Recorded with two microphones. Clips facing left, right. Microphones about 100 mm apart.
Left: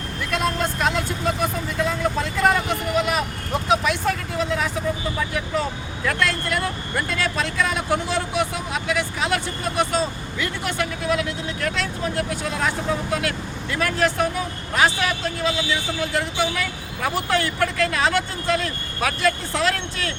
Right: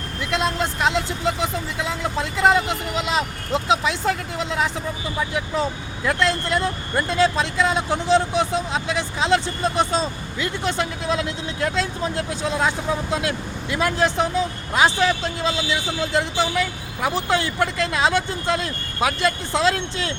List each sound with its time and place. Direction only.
0.8 s speech: 20° right (ahead or behind)
6.1 s speech: 20° right (ahead or behind)